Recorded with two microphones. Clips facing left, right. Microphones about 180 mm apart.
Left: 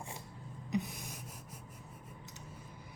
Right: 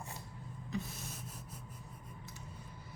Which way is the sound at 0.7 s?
15° left (ahead or behind).